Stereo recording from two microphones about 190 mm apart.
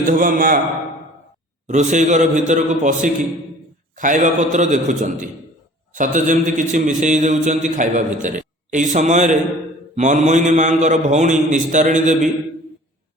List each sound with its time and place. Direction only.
0.0 s a man's voice: 45° right (ahead or behind)
1.6 s a man's voice: 40° right (ahead or behind)